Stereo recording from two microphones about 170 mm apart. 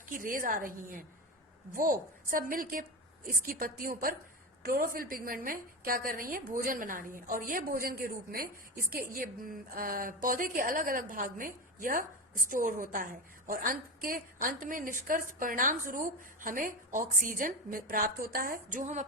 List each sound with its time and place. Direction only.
0.0 s a woman's voice: 50° right (ahead or behind)